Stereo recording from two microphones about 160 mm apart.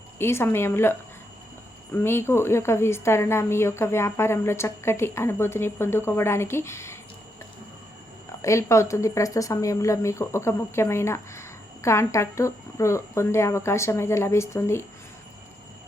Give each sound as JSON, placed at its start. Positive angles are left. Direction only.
{"t": 0.2, "sound": "speech", "side_deg": 15}
{"t": 8.4, "sound": "speech", "side_deg": 20}